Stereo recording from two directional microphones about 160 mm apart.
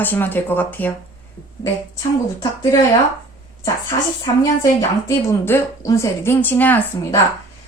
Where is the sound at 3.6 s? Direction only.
20° left (ahead or behind).